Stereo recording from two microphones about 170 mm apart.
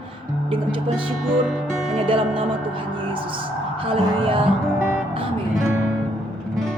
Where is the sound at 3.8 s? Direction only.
30° right (ahead or behind).